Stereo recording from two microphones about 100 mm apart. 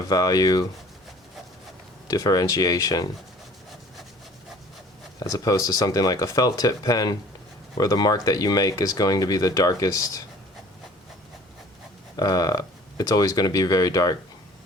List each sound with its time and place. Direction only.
0.0 s speech: 40° left (ahead or behind)
2.0 s speech: 40° left (ahead or behind)
5.4 s speech: 35° left (ahead or behind)
12.1 s speech: 40° left (ahead or behind)